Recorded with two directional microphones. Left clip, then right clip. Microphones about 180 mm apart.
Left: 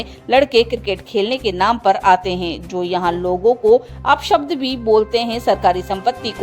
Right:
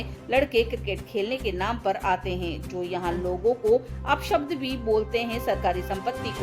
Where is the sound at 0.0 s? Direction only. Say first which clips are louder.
Left 10 dB; 50° left (ahead or behind).